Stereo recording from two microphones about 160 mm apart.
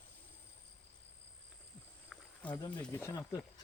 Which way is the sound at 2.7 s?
10° left (ahead or behind).